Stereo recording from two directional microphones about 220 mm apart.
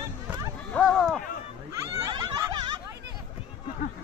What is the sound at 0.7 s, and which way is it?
Speech, centre (ahead or behind).